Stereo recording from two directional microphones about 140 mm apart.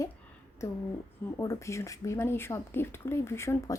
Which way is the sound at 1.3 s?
20° left (ahead or behind).